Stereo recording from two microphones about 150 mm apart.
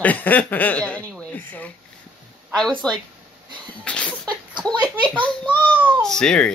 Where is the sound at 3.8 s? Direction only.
10° left (ahead or behind).